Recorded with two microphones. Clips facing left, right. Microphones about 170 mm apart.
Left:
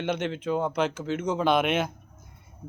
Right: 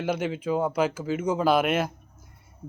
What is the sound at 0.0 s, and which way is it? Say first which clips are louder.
A man's voice: right 1 dB; 5° right (ahead or behind).